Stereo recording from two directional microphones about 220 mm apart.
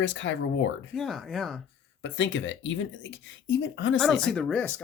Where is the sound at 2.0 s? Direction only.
60° left (ahead or behind).